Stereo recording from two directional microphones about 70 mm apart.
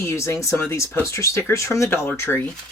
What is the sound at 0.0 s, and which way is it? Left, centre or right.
Speech, left.